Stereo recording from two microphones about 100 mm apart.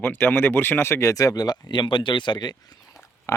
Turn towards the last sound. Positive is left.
turn(degrees=30)  # may be behind; listen again after turning